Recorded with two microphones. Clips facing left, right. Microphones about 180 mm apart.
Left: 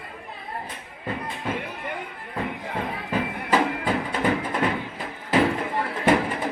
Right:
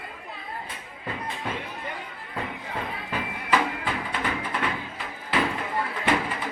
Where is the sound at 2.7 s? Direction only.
40° left (ahead or behind).